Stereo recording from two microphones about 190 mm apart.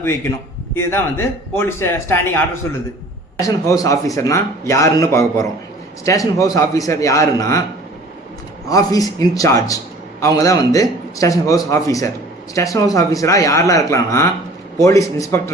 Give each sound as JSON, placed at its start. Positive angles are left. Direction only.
{"t": 0.7, "sound": "a man's voice", "side_deg": 10}
{"t": 3.4, "sound": "a man's voice", "side_deg": 15}
{"t": 8.7, "sound": "a man's voice", "side_deg": 20}